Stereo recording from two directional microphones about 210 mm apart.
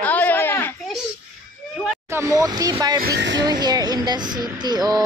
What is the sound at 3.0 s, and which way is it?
Speech, 55° right (ahead or behind).